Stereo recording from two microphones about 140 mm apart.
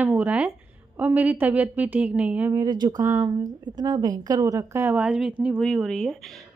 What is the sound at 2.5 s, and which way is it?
A woman's voice, 30° right (ahead or behind).